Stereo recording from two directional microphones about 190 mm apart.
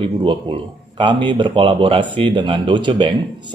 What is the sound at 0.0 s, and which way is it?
Speech, 25° right (ahead or behind).